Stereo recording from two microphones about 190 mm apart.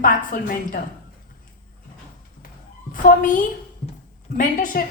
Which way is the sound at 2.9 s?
45° left (ahead or behind).